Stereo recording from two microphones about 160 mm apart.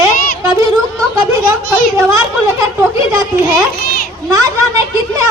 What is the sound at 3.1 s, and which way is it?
Speech, 20° right (ahead or behind).